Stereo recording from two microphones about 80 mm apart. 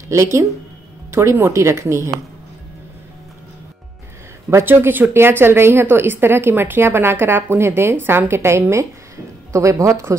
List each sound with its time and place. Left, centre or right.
0.1 s speech: right
4.5 s a woman's voice: right